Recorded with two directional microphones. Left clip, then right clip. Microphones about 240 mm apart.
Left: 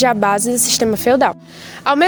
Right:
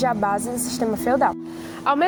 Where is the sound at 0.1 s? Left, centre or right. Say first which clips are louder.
Left 7 dB; left.